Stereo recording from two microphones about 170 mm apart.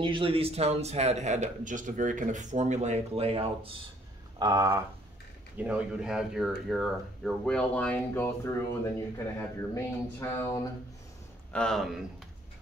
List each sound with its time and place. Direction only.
0.0 s speech: 30° right (ahead or behind)
4.4 s speech: 20° right (ahead or behind); by 10.6 s 15° left (ahead or behind)
11.5 s speech: 5° left (ahead or behind)